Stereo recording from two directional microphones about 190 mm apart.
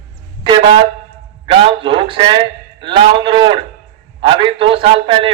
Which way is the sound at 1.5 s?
25° right (ahead or behind).